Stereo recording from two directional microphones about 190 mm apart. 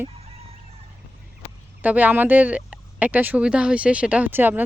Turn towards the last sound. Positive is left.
turn(degrees=-10)  # may be behind; listen again after turning